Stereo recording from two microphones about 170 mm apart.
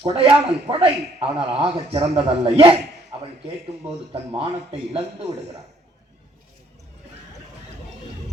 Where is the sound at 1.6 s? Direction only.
35° right (ahead or behind).